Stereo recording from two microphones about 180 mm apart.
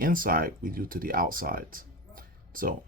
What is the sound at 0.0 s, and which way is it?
Speech, 50° right (ahead or behind).